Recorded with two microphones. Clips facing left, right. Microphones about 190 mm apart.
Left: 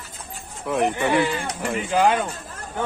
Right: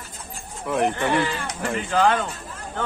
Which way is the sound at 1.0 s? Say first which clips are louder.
Left 2 dB; 15° left (ahead or behind).